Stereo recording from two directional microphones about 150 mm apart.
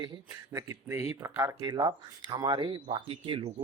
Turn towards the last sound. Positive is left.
turn(degrees=-40)  # may be behind; listen again after turning